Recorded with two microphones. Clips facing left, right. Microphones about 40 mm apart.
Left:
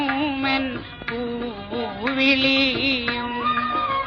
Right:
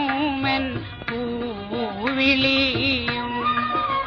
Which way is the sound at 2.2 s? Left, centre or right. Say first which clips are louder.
Left 1 dB; centre.